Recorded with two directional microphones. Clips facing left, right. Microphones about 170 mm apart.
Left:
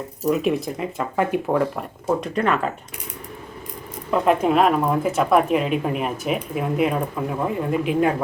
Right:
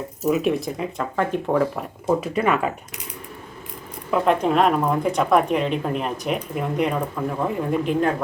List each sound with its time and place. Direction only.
0.3 s speech: centre (ahead or behind)
4.1 s speech: 5° left (ahead or behind)